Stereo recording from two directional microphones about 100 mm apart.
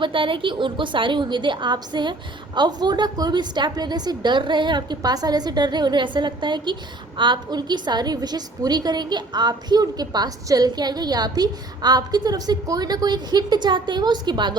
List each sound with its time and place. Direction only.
0.0 s a woman's voice: 60° right (ahead or behind)